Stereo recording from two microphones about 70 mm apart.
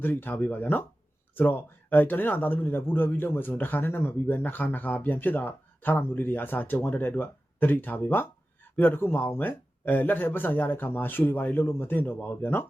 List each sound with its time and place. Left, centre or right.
0.0 s a man's voice: left